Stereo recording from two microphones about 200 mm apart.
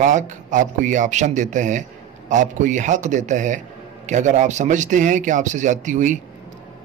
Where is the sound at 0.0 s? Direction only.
40° right (ahead or behind).